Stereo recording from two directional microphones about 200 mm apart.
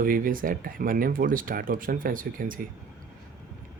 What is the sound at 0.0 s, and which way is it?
Speech, 45° right (ahead or behind).